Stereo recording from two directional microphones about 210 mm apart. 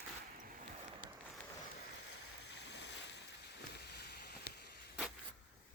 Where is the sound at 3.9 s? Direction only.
50° left (ahead or behind).